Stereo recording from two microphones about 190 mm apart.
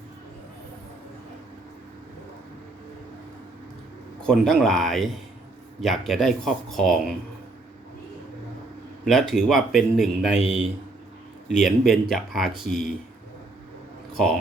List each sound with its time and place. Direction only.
4.2 s speech: 5° left (ahead or behind)
9.0 s speech: centre (ahead or behind)
11.6 s speech: centre (ahead or behind)